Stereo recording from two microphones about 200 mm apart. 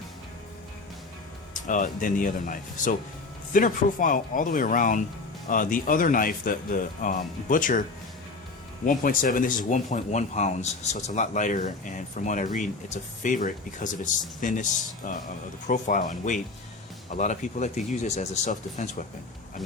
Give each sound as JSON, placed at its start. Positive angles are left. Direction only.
{"t": 1.6, "sound": "speech", "side_deg": 40}